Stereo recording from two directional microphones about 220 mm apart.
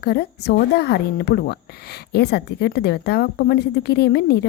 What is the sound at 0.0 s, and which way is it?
A woman's voice, 45° left (ahead or behind).